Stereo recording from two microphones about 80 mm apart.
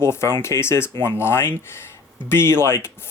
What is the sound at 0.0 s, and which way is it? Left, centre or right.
Speech, left.